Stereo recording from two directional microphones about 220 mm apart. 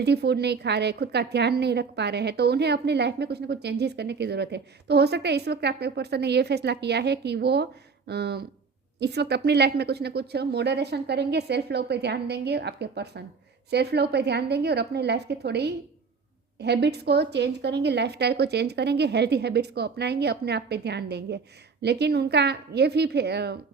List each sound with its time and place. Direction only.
0.0 s a woman's voice: 50° right (ahead or behind)